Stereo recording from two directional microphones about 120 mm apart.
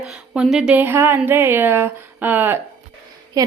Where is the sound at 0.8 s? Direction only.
15° right (ahead or behind).